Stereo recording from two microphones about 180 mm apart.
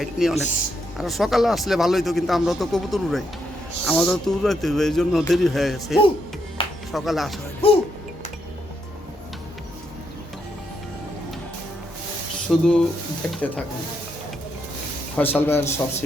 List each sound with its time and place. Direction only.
0.0 s speech: centre (ahead or behind)
6.6 s music: 30° left (ahead or behind)
6.9 s speech: centre (ahead or behind)
7.6 s speech: 30° left (ahead or behind)
12.5 s speech: centre (ahead or behind)
15.1 s a man's voice: 10° left (ahead or behind)